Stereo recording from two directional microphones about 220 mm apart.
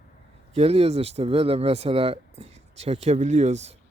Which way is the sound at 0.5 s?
25° right (ahead or behind).